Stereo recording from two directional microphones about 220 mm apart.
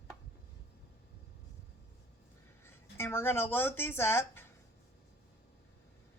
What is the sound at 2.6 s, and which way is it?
Speech, 10° left (ahead or behind).